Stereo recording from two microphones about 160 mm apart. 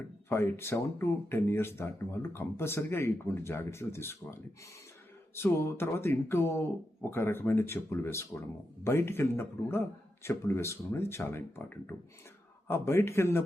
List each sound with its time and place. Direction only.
0.3 s speech: 15° left (ahead or behind)